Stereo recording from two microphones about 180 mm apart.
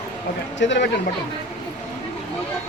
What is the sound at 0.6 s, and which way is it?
Speech, 85° left.